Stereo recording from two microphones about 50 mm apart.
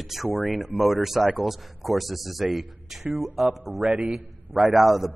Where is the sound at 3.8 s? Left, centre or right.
Right.